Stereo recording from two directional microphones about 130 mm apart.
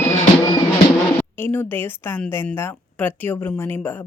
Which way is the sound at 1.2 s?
15° left (ahead or behind).